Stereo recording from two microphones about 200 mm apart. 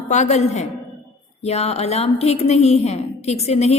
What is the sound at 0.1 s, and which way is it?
A woman's voice, 35° left (ahead or behind).